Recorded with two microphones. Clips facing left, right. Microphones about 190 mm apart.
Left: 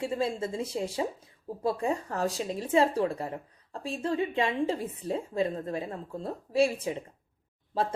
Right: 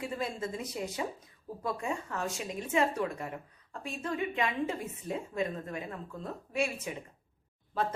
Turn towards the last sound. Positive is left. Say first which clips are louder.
# left 3 dB
turn(degrees=30)  # may be behind; listen again after turning